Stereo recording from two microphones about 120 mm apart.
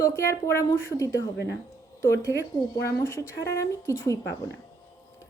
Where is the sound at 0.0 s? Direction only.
25° left (ahead or behind).